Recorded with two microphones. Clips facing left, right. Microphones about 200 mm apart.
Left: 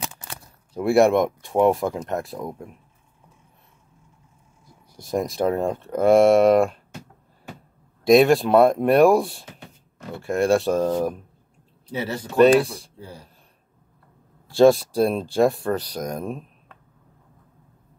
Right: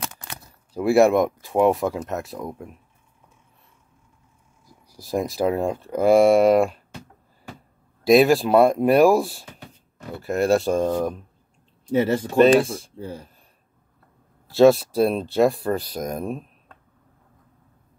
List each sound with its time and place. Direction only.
0.7 s speech: centre (ahead or behind)
4.9 s speech: centre (ahead or behind)
8.0 s speech: 5° right (ahead or behind)
11.9 s speech: 50° right (ahead or behind)
12.5 s speech: centre (ahead or behind)
14.5 s speech: 5° right (ahead or behind)